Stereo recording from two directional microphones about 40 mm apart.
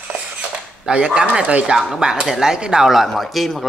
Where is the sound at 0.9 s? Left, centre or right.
Right.